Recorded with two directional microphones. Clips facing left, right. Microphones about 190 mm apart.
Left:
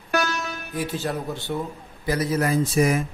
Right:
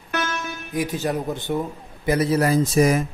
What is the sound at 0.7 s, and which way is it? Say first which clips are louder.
Speech: right 4 dB; 15° right (ahead or behind).